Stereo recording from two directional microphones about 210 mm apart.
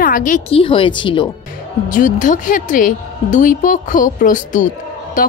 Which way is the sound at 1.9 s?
35° left (ahead or behind).